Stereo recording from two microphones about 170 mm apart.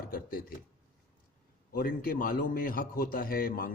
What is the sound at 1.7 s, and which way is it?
A man's voice, 60° left (ahead or behind).